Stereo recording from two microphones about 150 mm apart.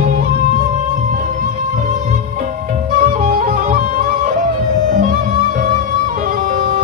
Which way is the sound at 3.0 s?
65° right (ahead or behind).